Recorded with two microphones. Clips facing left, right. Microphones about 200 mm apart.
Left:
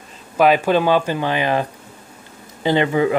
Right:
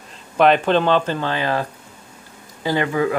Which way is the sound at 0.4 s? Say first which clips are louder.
Even; 5° left (ahead or behind).